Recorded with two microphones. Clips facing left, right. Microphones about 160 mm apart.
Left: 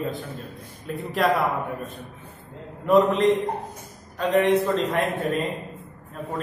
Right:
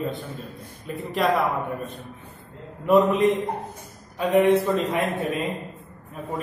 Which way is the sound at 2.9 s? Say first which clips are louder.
Even; 5° right (ahead or behind).